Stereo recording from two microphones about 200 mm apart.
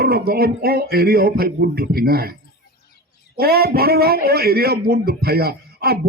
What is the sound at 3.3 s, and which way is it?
A man's voice, 50° right (ahead or behind).